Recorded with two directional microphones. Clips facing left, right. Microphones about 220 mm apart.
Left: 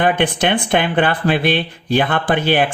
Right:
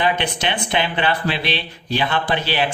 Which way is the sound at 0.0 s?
50° left (ahead or behind).